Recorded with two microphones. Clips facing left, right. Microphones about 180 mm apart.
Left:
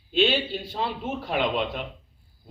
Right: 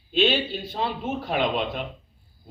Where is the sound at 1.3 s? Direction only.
40° right (ahead or behind).